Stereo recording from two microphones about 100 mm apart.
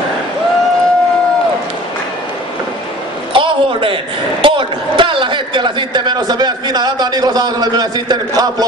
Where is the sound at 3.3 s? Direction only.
60° right (ahead or behind).